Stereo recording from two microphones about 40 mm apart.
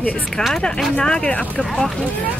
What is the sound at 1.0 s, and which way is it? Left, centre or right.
Speech, left.